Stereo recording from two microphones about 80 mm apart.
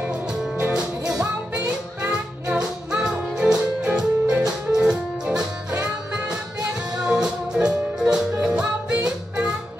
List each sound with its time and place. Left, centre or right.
0.6 s music: centre
2.4 s music: centre
7.0 s music: centre